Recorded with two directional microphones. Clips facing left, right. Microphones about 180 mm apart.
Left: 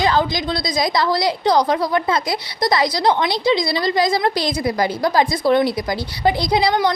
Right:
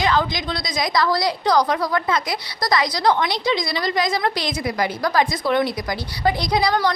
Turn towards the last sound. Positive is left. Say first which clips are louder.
# left 3 dB
turn(degrees=25)  # may be behind; listen again after turning